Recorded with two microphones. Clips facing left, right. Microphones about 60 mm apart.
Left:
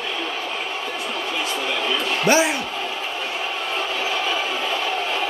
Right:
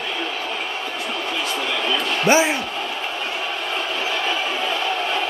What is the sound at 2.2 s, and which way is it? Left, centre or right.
Speech, right.